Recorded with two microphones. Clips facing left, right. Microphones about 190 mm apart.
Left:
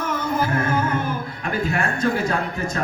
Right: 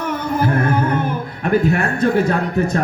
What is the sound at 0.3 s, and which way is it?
Music, 60° right (ahead or behind).